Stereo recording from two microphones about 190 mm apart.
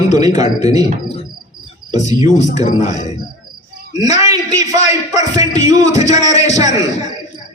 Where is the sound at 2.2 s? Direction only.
40° left (ahead or behind).